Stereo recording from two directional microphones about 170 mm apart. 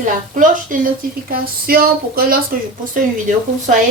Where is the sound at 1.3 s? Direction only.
60° right (ahead or behind).